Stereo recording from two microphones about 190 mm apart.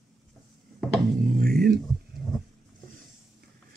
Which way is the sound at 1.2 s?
50° right (ahead or behind).